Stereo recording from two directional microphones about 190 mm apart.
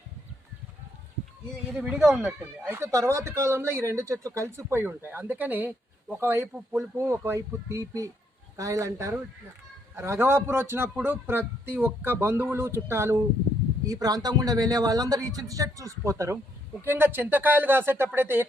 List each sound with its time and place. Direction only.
1.7 s speech: 5° right (ahead or behind)
2.6 s a man's voice: 15° right (ahead or behind)